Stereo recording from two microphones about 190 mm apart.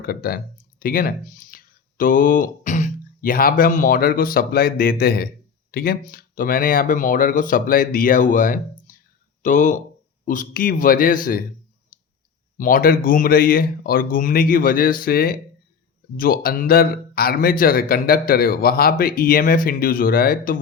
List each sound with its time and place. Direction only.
0.0 s a man's voice: 50° left (ahead or behind)
11.9 s clicking: 50° left (ahead or behind)
12.5 s a man's voice: 45° left (ahead or behind)